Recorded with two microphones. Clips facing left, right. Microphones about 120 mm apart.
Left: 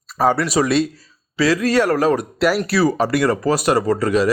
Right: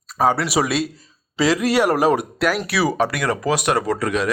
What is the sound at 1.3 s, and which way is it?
Speech, 15° right (ahead or behind).